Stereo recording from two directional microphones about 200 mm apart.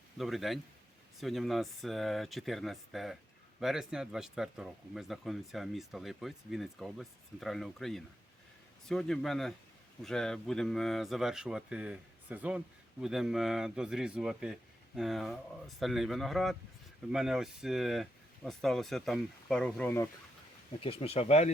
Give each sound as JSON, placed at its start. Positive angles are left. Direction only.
{"t": 0.2, "sound": "speech", "side_deg": 0}
{"t": 20.8, "sound": "speech", "side_deg": 30}